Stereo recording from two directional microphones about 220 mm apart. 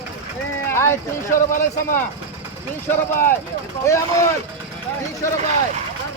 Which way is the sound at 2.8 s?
10° left (ahead or behind).